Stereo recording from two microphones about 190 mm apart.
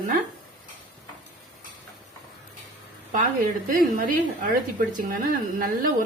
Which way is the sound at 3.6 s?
45° right (ahead or behind).